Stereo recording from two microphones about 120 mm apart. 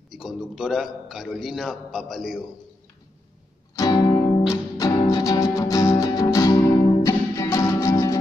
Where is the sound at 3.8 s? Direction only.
35° left (ahead or behind).